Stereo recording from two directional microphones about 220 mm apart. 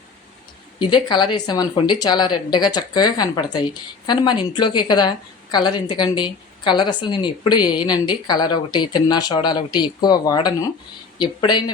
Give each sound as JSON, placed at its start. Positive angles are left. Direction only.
{"t": 0.8, "sound": "speech", "side_deg": 20}